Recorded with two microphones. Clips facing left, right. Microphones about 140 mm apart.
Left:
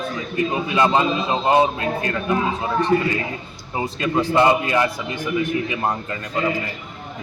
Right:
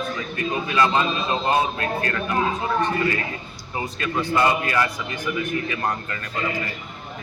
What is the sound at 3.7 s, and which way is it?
A man's voice, 20° left (ahead or behind).